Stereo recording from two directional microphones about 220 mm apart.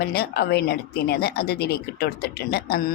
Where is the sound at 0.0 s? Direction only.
45° left (ahead or behind).